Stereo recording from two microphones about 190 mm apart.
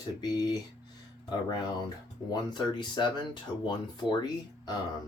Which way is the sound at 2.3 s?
25° left (ahead or behind).